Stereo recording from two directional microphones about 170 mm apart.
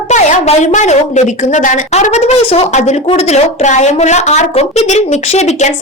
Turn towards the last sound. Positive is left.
turn(degrees=40)  # may be behind; listen again after turning